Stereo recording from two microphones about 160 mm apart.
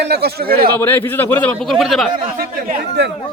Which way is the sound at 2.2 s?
65° right (ahead or behind).